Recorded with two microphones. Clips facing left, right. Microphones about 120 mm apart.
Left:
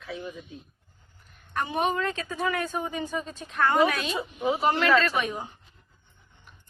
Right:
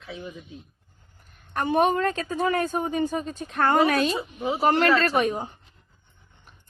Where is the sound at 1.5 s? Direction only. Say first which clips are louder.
Right 5 dB; 50° right (ahead or behind).